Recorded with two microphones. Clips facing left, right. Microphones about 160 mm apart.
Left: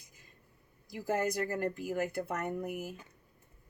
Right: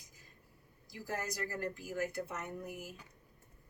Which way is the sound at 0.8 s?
55° left (ahead or behind).